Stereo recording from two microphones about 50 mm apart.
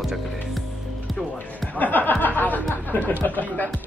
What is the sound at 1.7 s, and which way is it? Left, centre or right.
Music, left.